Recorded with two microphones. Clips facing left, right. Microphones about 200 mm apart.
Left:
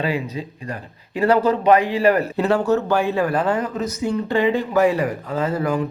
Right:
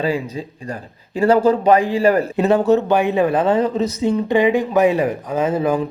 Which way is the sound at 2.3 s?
20° right (ahead or behind).